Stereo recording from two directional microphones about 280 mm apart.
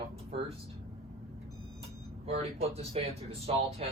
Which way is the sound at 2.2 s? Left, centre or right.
Right.